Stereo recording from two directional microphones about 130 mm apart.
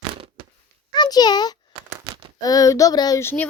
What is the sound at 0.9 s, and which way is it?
A child's voice, 30° left (ahead or behind).